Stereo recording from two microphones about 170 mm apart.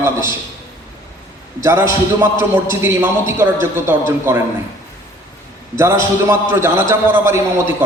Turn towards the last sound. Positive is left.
turn(degrees=-15)  # may be behind; listen again after turning